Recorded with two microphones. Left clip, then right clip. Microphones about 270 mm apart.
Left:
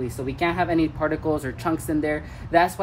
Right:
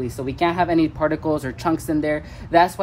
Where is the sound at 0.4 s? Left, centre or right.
Centre.